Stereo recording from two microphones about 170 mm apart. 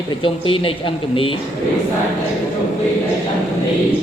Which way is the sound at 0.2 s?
30° left (ahead or behind).